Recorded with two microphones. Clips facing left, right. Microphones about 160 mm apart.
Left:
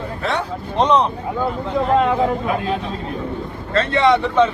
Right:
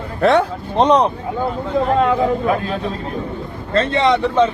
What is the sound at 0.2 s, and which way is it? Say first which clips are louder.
Speech: right 10 dB; 65° right (ahead or behind).